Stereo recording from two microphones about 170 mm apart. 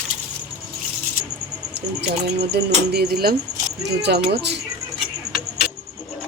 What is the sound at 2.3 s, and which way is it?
Speech, 75° right (ahead or behind).